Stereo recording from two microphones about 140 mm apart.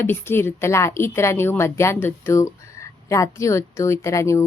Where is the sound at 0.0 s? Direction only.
15° left (ahead or behind).